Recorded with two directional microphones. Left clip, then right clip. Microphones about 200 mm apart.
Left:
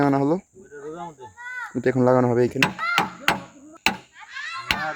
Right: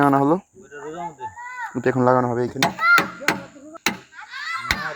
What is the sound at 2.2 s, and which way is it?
Speech, 35° left (ahead or behind).